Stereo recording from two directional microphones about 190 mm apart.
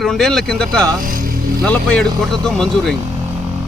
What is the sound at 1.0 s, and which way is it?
Music, 50° right (ahead or behind).